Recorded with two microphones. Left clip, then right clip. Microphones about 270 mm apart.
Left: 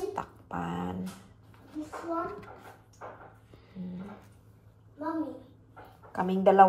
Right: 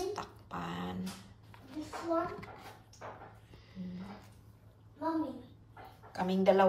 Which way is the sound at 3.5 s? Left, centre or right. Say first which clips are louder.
Left 4 dB; centre.